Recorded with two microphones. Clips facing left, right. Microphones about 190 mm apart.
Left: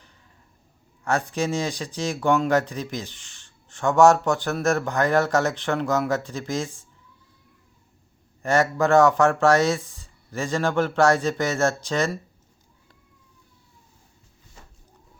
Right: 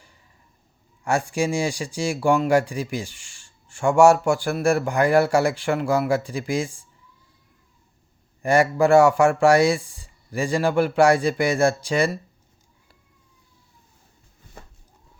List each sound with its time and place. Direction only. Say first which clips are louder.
1.0 s speech: right 2 dB; 10° right (ahead or behind)
8.4 s speech: right 3 dB; 10° right (ahead or behind)
14.6 s a sound: right 6 dB; 60° right (ahead or behind)